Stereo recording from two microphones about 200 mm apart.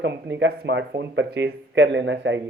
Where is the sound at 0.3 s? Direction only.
65° right (ahead or behind).